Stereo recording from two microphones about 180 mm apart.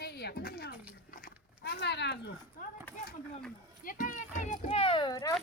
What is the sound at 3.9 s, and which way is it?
A child's voice, 50° left (ahead or behind).